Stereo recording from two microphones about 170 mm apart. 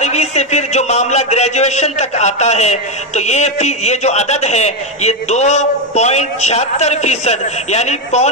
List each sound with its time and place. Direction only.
0.0 s a man's voice: 40° left (ahead or behind)